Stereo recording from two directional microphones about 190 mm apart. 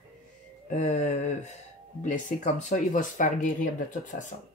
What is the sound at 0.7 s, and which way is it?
Speech, 40° left (ahead or behind).